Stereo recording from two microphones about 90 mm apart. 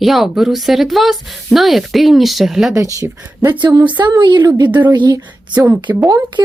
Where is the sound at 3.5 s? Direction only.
50° right (ahead or behind).